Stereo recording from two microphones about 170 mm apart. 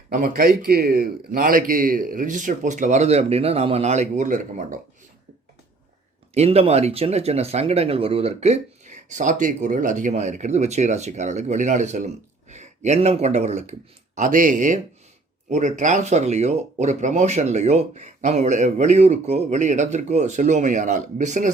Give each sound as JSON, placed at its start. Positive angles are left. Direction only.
{"t": 0.1, "sound": "speech", "side_deg": -50}
{"t": 6.3, "sound": "speech", "side_deg": -35}